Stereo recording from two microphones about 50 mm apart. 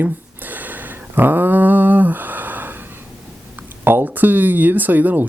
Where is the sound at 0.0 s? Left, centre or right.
Right.